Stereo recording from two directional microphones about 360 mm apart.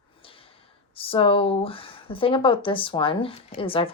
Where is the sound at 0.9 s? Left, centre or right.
Centre.